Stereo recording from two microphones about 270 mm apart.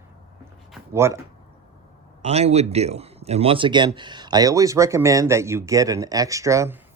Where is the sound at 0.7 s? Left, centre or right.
Centre.